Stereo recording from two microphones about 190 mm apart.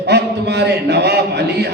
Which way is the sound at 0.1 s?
60° right (ahead or behind).